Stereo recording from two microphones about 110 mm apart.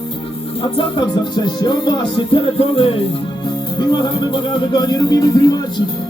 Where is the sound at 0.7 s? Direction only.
45° left (ahead or behind).